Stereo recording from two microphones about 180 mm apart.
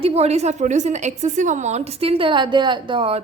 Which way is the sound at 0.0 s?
35° right (ahead or behind).